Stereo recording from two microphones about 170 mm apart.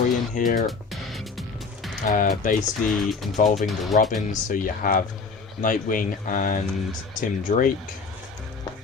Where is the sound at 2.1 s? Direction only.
55° left (ahead or behind).